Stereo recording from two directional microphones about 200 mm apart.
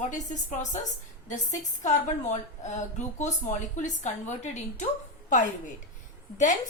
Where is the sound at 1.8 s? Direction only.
35° left (ahead or behind).